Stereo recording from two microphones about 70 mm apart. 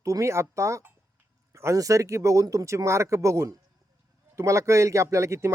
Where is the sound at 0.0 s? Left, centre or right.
Right.